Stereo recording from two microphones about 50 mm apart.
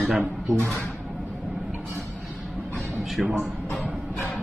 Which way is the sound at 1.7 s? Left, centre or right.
Right.